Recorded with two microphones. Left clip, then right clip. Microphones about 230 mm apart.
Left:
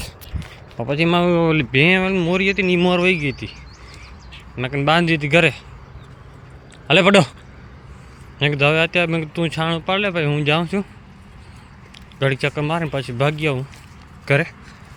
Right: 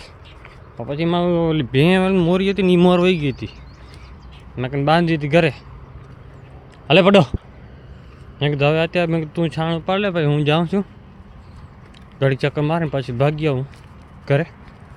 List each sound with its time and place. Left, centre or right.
0.8 s speech: centre
1.7 s speech: centre
4.5 s speech: centre
6.8 s speech: centre
8.4 s speech: centre
12.2 s speech: centre